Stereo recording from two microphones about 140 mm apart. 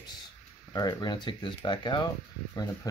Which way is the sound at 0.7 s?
25° left (ahead or behind).